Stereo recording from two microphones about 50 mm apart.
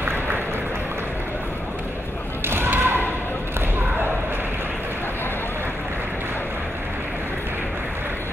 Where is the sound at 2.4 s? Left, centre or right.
Right.